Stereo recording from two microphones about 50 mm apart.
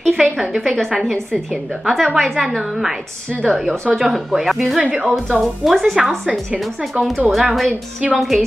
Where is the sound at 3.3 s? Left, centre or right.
Centre.